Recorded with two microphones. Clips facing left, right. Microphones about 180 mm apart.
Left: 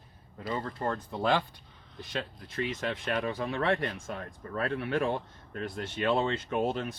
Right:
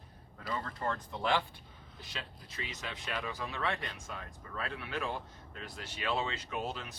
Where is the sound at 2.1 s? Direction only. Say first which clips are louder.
Left 10 dB; 55° left (ahead or behind).